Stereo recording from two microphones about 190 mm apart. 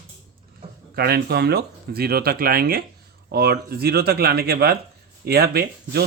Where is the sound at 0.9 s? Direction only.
55° right (ahead or behind).